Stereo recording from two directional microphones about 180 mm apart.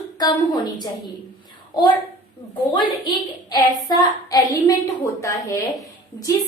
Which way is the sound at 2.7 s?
25° left (ahead or behind).